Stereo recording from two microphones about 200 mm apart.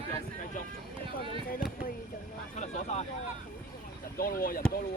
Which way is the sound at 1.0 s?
25° right (ahead or behind).